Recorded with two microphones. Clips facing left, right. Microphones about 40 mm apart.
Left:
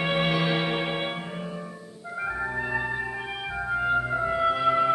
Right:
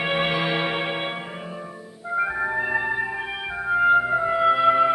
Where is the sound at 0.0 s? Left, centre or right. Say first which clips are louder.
Right 2 dB; centre.